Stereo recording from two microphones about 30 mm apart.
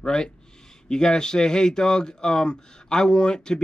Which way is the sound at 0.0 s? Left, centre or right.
Left.